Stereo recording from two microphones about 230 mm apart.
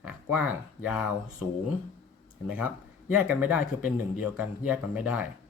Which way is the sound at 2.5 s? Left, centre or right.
Centre.